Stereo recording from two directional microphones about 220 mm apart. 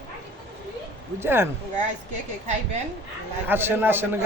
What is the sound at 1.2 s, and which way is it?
Speech, 10° right (ahead or behind).